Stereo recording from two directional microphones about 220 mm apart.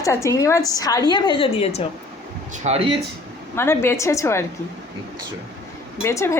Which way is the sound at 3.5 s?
10° left (ahead or behind).